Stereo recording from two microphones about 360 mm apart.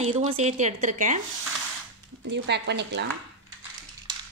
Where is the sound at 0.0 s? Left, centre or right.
Centre.